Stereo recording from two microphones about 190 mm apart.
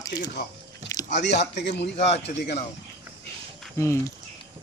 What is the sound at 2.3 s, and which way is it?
Speech, 45° left (ahead or behind).